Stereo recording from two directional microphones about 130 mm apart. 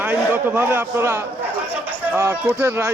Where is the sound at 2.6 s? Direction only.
25° right (ahead or behind).